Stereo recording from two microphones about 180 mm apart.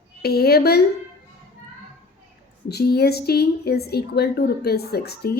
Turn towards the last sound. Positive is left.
turn(degrees=60)  # may be behind; listen again after turning